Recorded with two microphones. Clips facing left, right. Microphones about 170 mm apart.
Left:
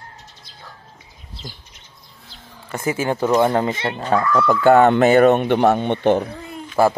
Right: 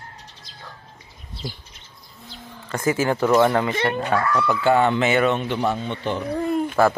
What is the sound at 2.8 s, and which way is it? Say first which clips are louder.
Speech: even; 25° left (ahead or behind).